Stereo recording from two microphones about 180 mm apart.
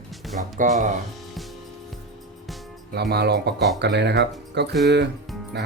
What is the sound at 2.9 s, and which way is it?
Speech, 65° right (ahead or behind).